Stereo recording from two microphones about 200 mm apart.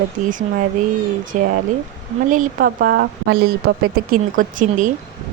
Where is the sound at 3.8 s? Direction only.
45° right (ahead or behind).